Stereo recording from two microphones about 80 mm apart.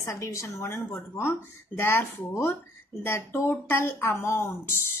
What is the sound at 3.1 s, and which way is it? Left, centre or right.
A woman's voice, left.